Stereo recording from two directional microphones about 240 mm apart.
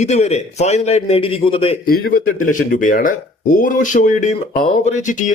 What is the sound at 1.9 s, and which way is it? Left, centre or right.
Speech, left.